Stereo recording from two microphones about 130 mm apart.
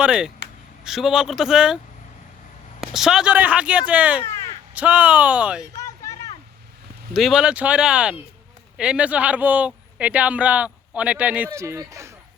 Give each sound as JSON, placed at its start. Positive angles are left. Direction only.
{"t": 0.0, "sound": "speech", "side_deg": -5}
{"t": 2.8, "sound": "speech", "side_deg": -5}
{"t": 4.3, "sound": "crow", "side_deg": 20}
{"t": 4.7, "sound": "speech", "side_deg": -10}
{"t": 5.7, "sound": "a sound", "side_deg": 25}
{"t": 7.1, "sound": "speech", "side_deg": 0}